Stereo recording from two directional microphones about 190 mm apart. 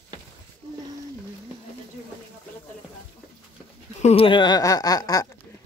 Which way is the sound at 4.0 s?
35° left (ahead or behind).